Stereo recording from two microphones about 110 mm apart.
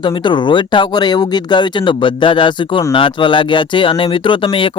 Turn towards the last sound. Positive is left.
turn(degrees=55)  # may be behind; listen again after turning